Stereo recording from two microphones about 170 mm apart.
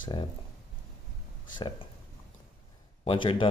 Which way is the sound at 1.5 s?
25° left (ahead or behind).